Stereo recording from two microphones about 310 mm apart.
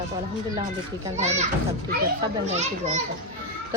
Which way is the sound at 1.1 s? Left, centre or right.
Right.